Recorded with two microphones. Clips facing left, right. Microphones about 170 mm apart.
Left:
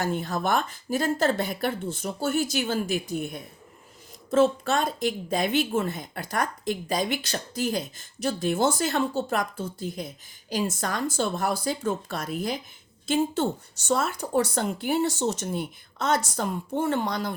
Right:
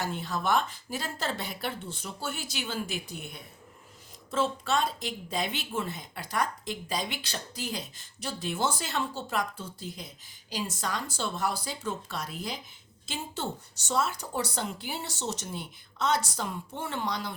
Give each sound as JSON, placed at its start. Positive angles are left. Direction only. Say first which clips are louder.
{"t": 0.0, "sound": "a woman's voice", "louder": "left 5 dB", "side_deg": 50}